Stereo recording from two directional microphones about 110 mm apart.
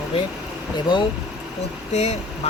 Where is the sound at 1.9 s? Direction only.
90° left.